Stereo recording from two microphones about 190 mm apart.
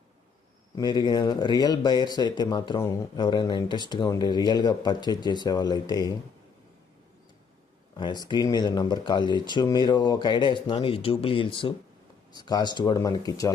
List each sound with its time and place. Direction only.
0.8 s speech: 25° left (ahead or behind)
7.9 s speech: 20° left (ahead or behind)